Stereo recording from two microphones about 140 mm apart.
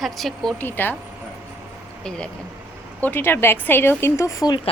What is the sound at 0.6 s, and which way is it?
Speech, 15° left (ahead or behind).